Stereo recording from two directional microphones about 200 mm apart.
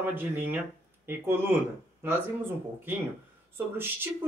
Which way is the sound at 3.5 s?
10° right (ahead or behind).